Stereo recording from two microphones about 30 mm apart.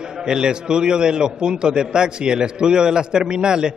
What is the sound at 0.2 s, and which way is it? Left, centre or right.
A man's voice, right.